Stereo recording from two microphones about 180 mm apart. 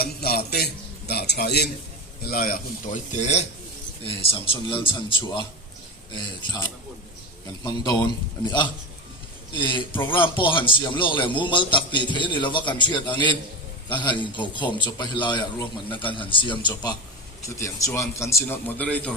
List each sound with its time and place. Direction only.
0.0 s a sound: 55° left (ahead or behind)
2.2 s a man's voice: 55° left (ahead or behind); by 5.5 s 25° left (ahead or behind)
7.6 s a man's voice: 25° left (ahead or behind); by 19.1 s 10° left (ahead or behind)